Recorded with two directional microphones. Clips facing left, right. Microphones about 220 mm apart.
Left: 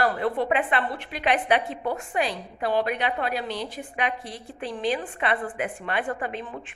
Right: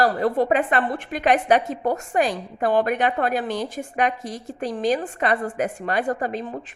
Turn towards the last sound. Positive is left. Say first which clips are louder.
# right 5 dB
turn(degrees=-40)  # may be behind; listen again after turning